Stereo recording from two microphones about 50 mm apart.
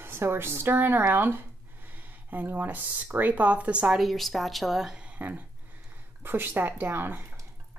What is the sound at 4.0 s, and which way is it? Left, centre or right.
Speech, centre.